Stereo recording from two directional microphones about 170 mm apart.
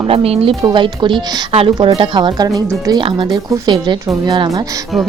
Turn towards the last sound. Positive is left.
turn(degrees=-25)  # may be behind; listen again after turning